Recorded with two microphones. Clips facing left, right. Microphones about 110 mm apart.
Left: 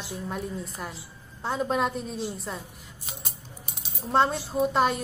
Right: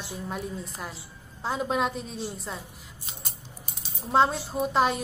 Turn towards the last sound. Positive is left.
turn(degrees=0)  # may be behind; listen again after turning